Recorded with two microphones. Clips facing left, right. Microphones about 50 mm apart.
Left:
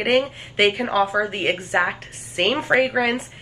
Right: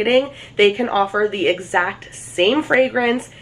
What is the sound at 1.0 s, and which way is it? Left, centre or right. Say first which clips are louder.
A woman's voice: right 5 dB; centre.